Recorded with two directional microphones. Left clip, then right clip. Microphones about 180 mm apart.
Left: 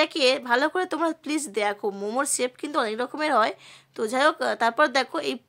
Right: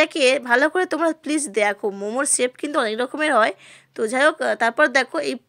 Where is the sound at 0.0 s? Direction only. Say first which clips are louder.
Right 4 dB; 20° right (ahead or behind).